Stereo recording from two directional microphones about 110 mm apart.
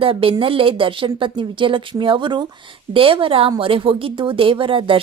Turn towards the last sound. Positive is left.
turn(degrees=-50)  # may be behind; listen again after turning